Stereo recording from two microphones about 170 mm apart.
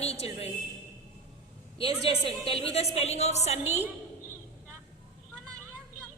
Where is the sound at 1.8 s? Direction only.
35° left (ahead or behind).